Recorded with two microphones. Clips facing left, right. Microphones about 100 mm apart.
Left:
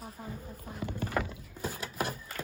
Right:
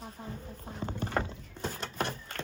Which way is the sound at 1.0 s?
30° right (ahead or behind).